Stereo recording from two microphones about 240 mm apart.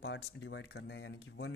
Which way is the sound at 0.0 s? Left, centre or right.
Left.